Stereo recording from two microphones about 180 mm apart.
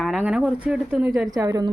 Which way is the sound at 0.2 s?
5° right (ahead or behind).